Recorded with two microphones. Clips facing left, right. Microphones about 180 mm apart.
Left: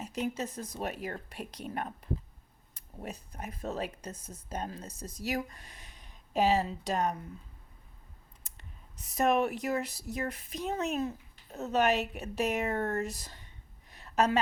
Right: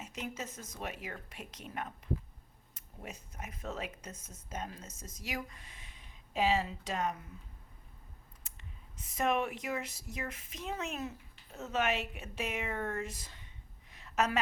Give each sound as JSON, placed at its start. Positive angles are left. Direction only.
{"t": 0.0, "sound": "a woman's voice", "side_deg": 35}
{"t": 9.0, "sound": "a woman's voice", "side_deg": 40}
{"t": 13.9, "sound": "a sound", "side_deg": 35}